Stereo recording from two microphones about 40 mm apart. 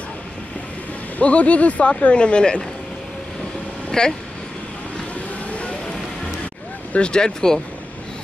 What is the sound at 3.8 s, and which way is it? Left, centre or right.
Vehicle, centre.